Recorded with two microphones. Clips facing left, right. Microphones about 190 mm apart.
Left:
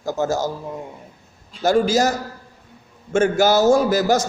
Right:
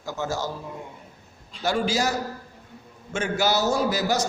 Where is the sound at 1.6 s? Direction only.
45° left (ahead or behind).